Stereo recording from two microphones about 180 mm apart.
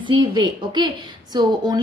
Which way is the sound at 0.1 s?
25° right (ahead or behind).